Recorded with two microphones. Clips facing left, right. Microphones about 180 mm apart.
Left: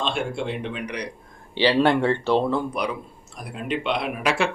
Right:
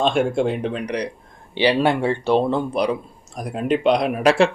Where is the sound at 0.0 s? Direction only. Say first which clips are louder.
Right 8 dB; 45° right (ahead or behind).